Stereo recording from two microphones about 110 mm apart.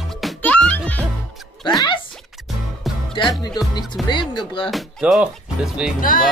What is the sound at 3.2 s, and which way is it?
Speech, 50° left (ahead or behind).